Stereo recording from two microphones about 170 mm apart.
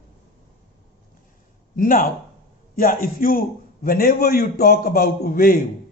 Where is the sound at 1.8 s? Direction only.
55° left (ahead or behind).